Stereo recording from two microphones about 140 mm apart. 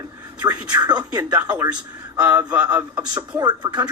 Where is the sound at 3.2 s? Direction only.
25° right (ahead or behind).